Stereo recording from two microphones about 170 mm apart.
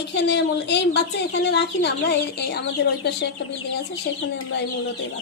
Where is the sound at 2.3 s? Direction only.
75° left (ahead or behind).